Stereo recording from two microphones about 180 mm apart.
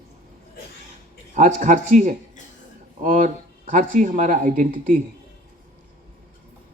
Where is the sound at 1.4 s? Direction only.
45° right (ahead or behind).